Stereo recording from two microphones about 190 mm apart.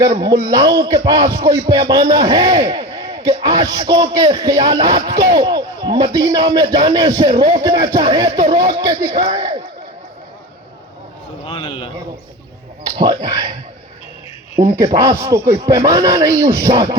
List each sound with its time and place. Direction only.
0.0 s a man's voice: 20° right (ahead or behind)
11.4 s a sound: 25° left (ahead or behind)
14.6 s a man's voice: 15° right (ahead or behind)